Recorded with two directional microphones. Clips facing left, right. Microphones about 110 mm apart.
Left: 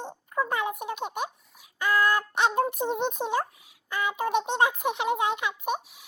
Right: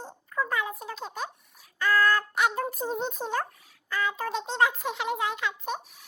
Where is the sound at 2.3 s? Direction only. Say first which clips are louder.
Left 3 dB; 25° left (ahead or behind).